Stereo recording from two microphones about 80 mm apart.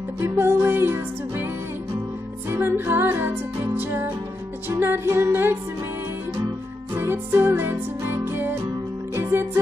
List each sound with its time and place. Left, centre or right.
0.2 s music: right
2.5 s music: right
7.0 s music: right